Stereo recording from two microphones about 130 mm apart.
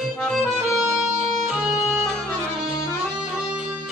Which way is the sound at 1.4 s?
Centre (ahead or behind).